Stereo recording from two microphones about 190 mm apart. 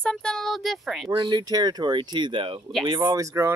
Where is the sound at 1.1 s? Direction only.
25° right (ahead or behind).